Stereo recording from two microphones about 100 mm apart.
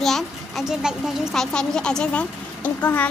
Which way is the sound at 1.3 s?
5° left (ahead or behind).